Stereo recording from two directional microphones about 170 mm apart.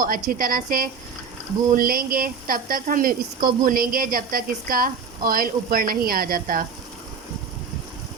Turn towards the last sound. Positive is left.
turn(degrees=-55)  # may be behind; listen again after turning